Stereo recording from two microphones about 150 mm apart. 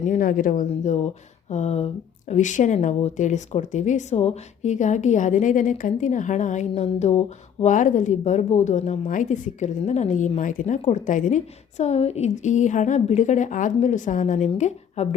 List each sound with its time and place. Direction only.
0.0 s speech: 60° left (ahead or behind); by 1.9 s 45° left (ahead or behind)
2.3 s a woman's voice: 55° left (ahead or behind)